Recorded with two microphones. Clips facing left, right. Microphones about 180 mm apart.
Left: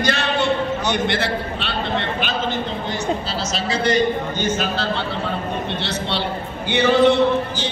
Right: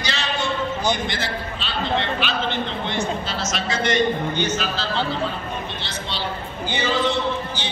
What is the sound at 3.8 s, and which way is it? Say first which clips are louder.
Speech: left 2 dB; 35° left (ahead or behind).